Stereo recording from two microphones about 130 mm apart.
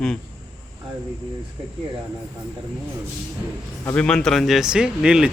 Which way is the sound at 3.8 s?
10° left (ahead or behind).